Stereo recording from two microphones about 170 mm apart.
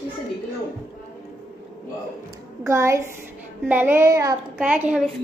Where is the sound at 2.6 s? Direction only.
15° right (ahead or behind).